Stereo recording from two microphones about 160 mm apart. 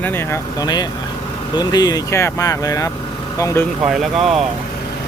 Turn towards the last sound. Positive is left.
turn(degrees=0)  # may be behind; listen again after turning